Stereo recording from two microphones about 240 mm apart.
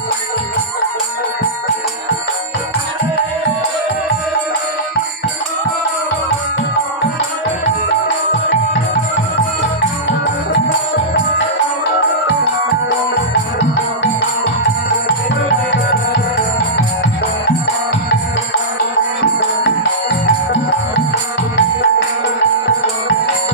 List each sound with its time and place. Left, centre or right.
7.6 s music: left
21.5 s music: left